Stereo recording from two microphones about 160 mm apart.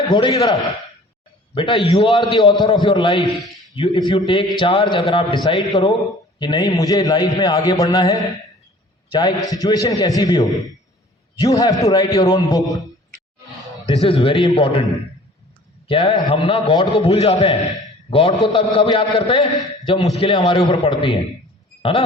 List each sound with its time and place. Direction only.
0.1 s a man's voice: 25° left (ahead or behind)
14.0 s a man's voice: 35° left (ahead or behind)
15.9 s a man's voice: 35° left (ahead or behind)
21.8 s a sound: 35° left (ahead or behind)